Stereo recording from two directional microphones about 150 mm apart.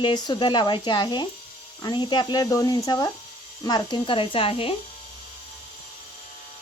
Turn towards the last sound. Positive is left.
turn(degrees=40)  # may be behind; listen again after turning